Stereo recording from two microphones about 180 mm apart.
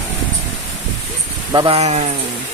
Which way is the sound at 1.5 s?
20° right (ahead or behind).